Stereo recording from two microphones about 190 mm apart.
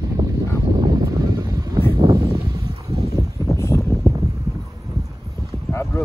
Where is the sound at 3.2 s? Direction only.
15° left (ahead or behind).